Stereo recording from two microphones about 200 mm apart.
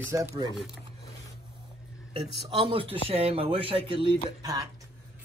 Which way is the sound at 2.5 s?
25° right (ahead or behind).